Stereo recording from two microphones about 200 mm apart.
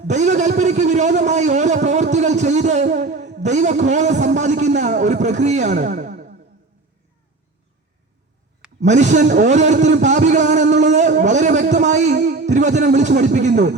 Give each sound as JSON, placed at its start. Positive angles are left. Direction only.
{"t": 0.1, "sound": "a man's voice", "side_deg": -35}
{"t": 8.8, "sound": "a man's voice", "side_deg": -35}